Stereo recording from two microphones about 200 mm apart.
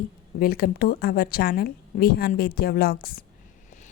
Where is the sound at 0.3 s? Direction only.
50° left (ahead or behind).